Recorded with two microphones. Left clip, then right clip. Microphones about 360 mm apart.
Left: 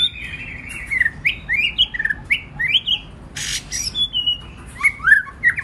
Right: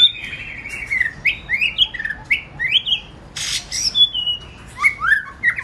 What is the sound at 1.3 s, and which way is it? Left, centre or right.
Bird, centre.